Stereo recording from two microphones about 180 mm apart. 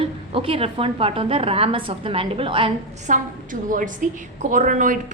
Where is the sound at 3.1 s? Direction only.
45° right (ahead or behind).